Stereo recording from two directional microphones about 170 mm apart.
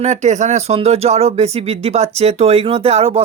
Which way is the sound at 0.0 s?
45° right (ahead or behind).